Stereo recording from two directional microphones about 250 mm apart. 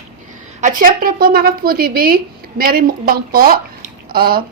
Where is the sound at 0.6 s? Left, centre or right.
Right.